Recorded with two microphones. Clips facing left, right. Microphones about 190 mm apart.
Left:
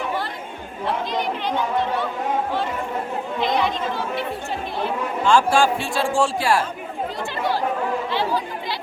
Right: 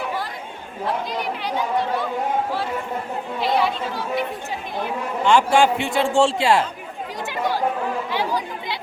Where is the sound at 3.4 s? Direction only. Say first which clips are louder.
Right 1 dB; 5° right (ahead or behind); by 6.7 s 20° right (ahead or behind).